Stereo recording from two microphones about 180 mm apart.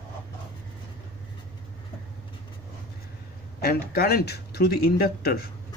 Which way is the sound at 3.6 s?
60° left (ahead or behind).